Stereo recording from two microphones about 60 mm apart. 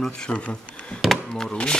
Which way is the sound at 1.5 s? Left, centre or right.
Centre.